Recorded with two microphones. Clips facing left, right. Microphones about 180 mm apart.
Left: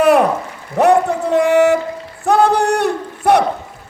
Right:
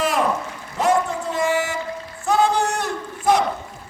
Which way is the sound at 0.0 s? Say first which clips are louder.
Left 9 dB; 65° left (ahead or behind).